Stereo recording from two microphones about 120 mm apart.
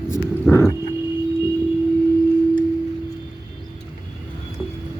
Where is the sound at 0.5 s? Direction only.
5° left (ahead or behind).